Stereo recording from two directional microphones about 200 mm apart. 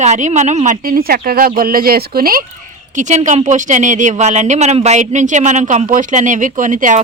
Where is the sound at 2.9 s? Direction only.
35° right (ahead or behind).